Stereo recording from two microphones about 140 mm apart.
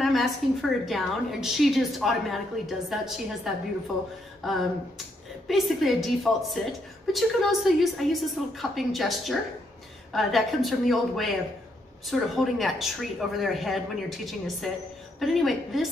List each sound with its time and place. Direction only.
0.0 s a woman's voice: centre (ahead or behind)